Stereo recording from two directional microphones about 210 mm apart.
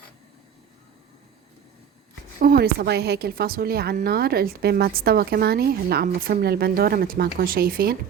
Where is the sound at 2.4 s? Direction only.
45° right (ahead or behind).